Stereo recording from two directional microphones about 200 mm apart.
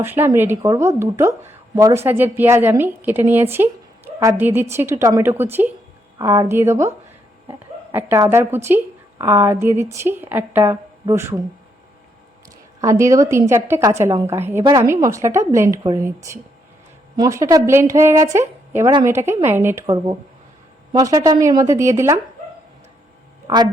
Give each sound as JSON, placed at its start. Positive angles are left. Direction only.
{"t": 0.0, "sound": "a woman's voice", "side_deg": -10}
{"t": 7.9, "sound": "a woman's voice", "side_deg": -10}
{"t": 12.8, "sound": "a woman's voice", "side_deg": -15}